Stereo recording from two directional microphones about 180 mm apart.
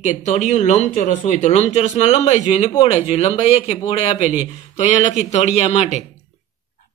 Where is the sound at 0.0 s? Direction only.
40° left (ahead or behind).